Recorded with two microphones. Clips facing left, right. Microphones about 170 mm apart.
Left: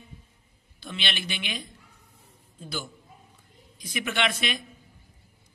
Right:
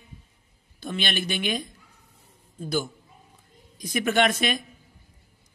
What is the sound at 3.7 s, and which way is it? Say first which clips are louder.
Speech: right 8 dB; 45° right (ahead or behind).